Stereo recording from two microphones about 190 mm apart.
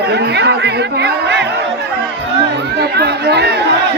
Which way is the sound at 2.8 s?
60° right (ahead or behind).